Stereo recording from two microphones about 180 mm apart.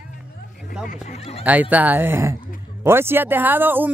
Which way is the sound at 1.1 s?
35° left (ahead or behind).